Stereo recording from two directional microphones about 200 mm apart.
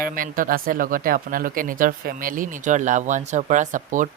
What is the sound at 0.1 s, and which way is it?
Speech, 45° right (ahead or behind).